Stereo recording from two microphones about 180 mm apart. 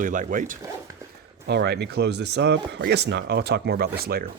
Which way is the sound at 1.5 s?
65° right (ahead or behind).